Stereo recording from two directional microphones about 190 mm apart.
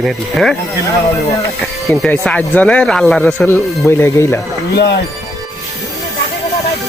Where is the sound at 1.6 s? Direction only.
5° left (ahead or behind).